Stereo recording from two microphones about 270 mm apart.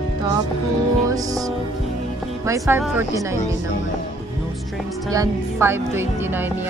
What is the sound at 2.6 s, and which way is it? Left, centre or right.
Speech, centre.